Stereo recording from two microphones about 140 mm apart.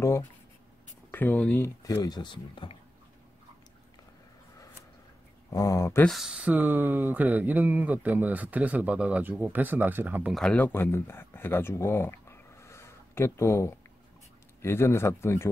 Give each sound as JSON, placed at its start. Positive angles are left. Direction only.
{"t": 0.0, "sound": "speech", "side_deg": 20}
{"t": 1.8, "sound": "speech", "side_deg": 25}
{"t": 5.5, "sound": "speech", "side_deg": 25}
{"t": 6.0, "sound": "speech", "side_deg": -5}
{"t": 10.3, "sound": "speech", "side_deg": 5}